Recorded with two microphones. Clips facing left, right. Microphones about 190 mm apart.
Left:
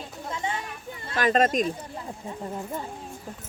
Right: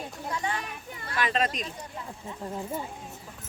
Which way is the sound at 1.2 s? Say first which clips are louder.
Left 7 dB; 45° left (ahead or behind).